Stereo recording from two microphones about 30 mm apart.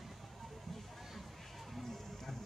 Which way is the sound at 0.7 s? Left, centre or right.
Centre.